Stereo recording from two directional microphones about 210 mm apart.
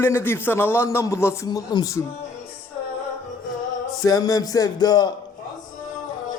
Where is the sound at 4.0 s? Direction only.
15° left (ahead or behind).